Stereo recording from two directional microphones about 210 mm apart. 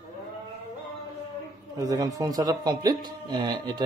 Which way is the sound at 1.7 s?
15° right (ahead or behind).